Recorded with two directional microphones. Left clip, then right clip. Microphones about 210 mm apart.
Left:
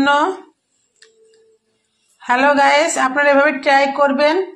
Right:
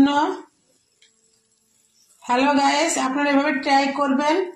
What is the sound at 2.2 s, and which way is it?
A woman's voice, 20° left (ahead or behind).